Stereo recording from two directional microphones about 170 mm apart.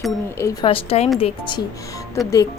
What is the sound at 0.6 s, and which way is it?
Speech, 35° left (ahead or behind).